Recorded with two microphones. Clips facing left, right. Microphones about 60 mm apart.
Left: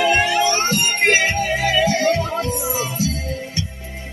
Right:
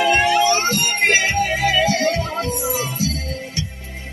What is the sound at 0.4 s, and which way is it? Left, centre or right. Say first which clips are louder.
Music: right 1 dB; left.